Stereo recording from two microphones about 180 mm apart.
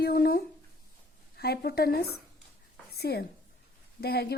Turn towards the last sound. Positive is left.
turn(degrees=65)  # may be behind; listen again after turning